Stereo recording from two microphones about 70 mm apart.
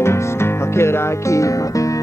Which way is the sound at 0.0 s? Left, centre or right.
Left.